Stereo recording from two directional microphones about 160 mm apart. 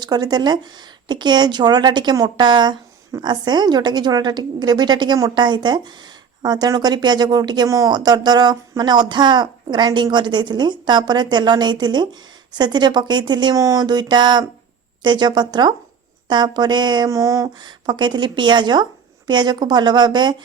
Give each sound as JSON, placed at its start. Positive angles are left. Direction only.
{"t": 0.0, "sound": "speech", "side_deg": -25}